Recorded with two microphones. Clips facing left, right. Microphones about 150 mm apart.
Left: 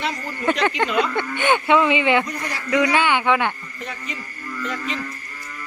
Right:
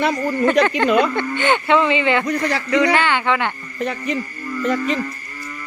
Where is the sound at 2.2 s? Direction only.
75° right (ahead or behind).